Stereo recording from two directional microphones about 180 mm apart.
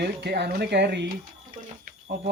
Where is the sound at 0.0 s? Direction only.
65° right (ahead or behind).